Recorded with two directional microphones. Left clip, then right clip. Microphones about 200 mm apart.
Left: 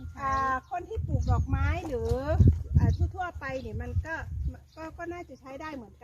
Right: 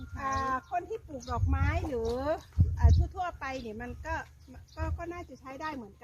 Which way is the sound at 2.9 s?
35° right (ahead or behind).